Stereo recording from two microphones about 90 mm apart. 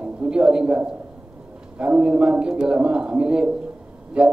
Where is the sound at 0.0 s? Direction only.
10° right (ahead or behind).